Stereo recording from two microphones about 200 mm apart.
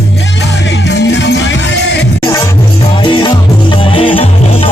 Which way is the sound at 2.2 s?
15° left (ahead or behind).